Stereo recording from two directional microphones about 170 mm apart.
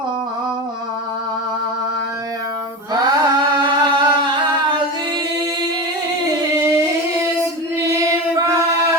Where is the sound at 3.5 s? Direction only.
25° right (ahead or behind).